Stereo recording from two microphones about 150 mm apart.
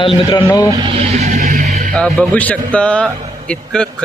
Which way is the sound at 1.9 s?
10° left (ahead or behind).